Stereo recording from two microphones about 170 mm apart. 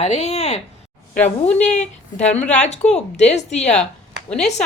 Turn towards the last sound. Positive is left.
turn(degrees=40)  # may be behind; listen again after turning